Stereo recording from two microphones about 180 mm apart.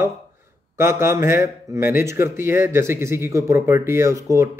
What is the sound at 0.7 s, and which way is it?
Speech, 15° right (ahead or behind).